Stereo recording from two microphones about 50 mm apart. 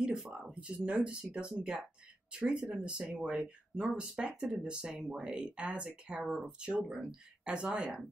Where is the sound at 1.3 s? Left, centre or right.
Centre.